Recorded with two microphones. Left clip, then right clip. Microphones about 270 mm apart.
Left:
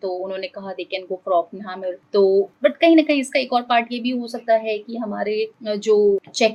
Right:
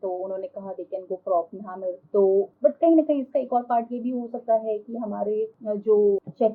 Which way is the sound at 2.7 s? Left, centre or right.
Centre.